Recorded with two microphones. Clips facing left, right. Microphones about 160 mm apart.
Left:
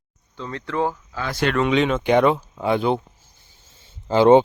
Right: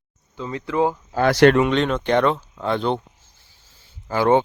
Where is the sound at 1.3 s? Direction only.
75° right (ahead or behind).